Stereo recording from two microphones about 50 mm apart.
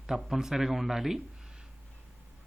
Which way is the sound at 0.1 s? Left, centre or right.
Centre.